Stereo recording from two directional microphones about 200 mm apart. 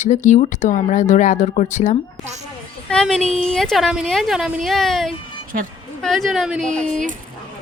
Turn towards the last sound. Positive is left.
turn(degrees=5)  # may be behind; listen again after turning